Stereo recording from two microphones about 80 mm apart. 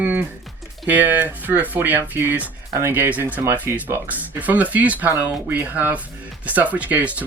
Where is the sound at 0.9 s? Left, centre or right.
Right.